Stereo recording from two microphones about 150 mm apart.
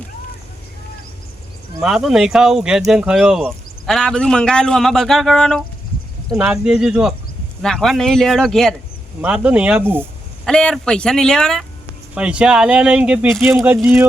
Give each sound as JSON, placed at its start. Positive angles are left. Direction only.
{"t": 1.8, "sound": "speech", "side_deg": -5}
{"t": 9.2, "sound": "speech", "side_deg": -10}
{"t": 10.4, "sound": "speech", "side_deg": 5}
{"t": 12.1, "sound": "speech", "side_deg": -5}
{"t": 13.5, "sound": "speech", "side_deg": -20}
{"t": 13.7, "sound": "speech", "side_deg": -5}